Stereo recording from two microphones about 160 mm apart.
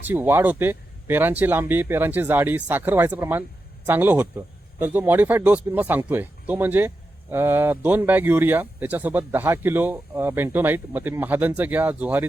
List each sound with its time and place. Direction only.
0.1 s speech: 10° right (ahead or behind)